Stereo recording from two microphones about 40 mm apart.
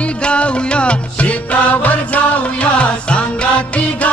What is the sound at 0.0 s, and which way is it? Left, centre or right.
Music, left.